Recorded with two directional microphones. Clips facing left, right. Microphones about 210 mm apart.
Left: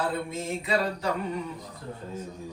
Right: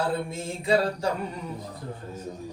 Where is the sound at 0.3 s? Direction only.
30° right (ahead or behind).